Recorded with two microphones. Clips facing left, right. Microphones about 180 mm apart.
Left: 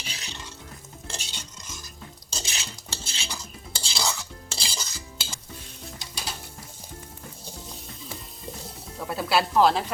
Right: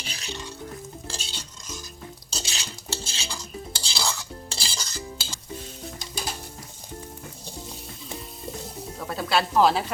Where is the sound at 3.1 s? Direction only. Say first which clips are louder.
Right 1 dB; 20° left (ahead or behind).